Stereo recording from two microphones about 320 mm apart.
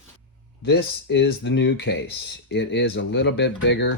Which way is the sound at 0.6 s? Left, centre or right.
Left.